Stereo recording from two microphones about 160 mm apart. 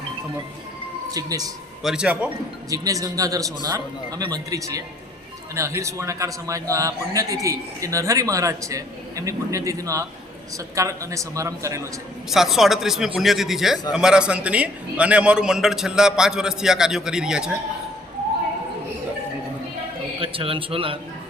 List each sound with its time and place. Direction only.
1.1 s a man's voice: 20° right (ahead or behind)
1.8 s a man's voice: 5° right (ahead or behind)
2.6 s a man's voice: 20° right (ahead or behind)
12.3 s a man's voice: centre (ahead or behind)
20.1 s speech: 35° right (ahead or behind)